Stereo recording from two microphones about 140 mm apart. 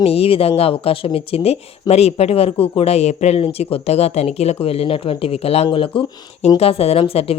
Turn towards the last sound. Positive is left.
turn(degrees=45)  # may be behind; listen again after turning